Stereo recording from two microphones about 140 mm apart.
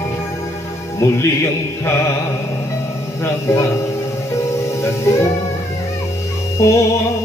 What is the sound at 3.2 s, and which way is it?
Speech, 20° left (ahead or behind).